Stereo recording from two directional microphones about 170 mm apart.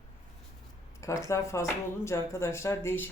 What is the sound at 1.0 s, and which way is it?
Speech, 20° left (ahead or behind).